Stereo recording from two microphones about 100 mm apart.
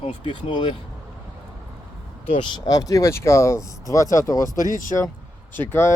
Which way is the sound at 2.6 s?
35° left (ahead or behind).